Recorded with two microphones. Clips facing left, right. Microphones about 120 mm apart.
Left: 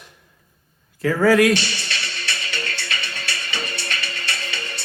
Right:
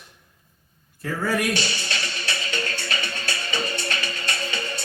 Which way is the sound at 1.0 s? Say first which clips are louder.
Left 9 dB; 90° left.